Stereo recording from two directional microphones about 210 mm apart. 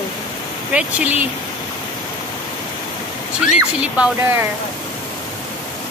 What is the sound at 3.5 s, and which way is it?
Speech, 5° right (ahead or behind).